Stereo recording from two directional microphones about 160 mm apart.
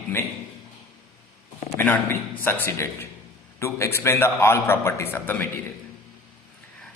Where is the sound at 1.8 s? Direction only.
15° left (ahead or behind).